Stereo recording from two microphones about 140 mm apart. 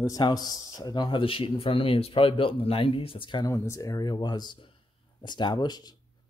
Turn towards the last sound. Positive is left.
turn(degrees=30)  # may be behind; listen again after turning